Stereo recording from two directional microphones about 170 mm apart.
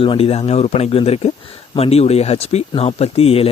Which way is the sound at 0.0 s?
35° left (ahead or behind).